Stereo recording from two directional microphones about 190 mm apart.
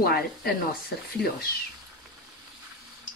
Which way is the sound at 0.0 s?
55° left (ahead or behind).